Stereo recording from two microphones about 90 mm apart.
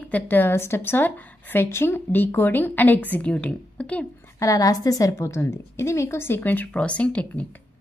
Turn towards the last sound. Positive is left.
turn(degrees=15)  # may be behind; listen again after turning